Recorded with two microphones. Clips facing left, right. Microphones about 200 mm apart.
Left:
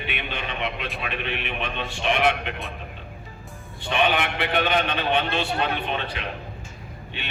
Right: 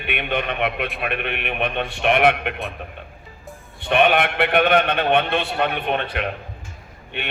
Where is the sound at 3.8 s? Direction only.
60° right (ahead or behind).